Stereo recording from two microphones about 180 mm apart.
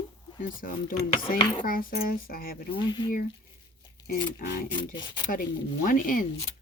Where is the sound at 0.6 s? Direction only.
50° left (ahead or behind).